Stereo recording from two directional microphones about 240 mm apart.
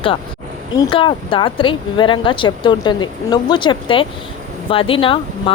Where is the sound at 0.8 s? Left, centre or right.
Centre.